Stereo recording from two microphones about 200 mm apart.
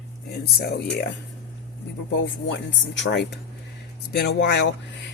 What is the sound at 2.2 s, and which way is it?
A woman's voice, 65° left (ahead or behind).